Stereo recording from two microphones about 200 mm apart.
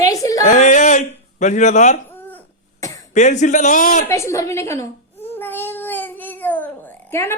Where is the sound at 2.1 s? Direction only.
10° left (ahead or behind).